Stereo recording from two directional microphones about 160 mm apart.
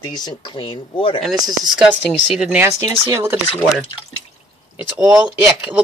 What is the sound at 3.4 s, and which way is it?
Speech, 30° left (ahead or behind).